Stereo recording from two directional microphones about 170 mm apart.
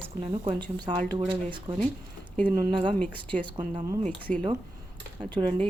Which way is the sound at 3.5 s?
25° right (ahead or behind).